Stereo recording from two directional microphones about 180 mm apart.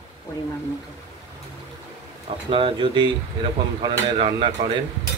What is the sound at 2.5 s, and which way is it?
Speech, 25° right (ahead or behind).